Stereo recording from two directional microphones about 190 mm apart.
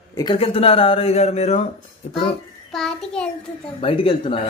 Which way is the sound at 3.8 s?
30° left (ahead or behind).